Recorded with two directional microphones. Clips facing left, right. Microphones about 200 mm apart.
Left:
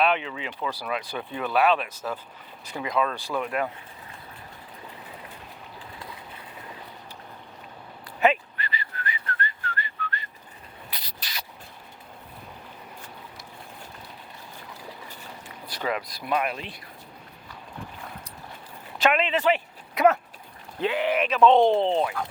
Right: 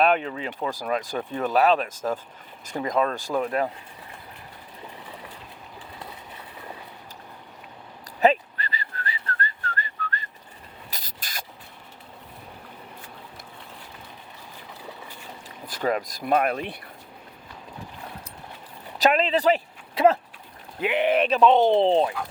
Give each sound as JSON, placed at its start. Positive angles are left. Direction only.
{"t": 0.0, "sound": "speech", "side_deg": -45}
{"t": 8.2, "sound": "whistling", "side_deg": -35}
{"t": 10.9, "sound": "a sound", "side_deg": -45}
{"t": 15.4, "sound": "speech", "side_deg": -45}
{"t": 18.9, "sound": "speech", "side_deg": -35}
{"t": 21.2, "sound": "speech", "side_deg": -35}
{"t": 21.4, "sound": "speech", "side_deg": -5}
{"t": 21.8, "sound": "speech", "side_deg": -30}